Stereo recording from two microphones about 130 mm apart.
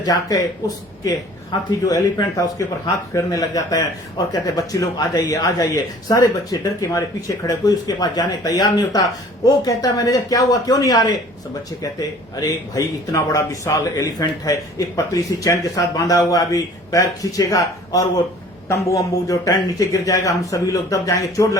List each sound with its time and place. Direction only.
0.0 s speech: 30° left (ahead or behind)
1.8 s speech: 25° left (ahead or behind)